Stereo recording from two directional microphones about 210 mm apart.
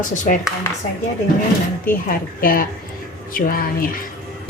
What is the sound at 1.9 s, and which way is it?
Speech, 45° left (ahead or behind).